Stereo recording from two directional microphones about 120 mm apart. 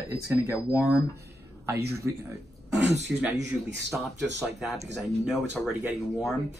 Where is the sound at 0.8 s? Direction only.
5° right (ahead or behind).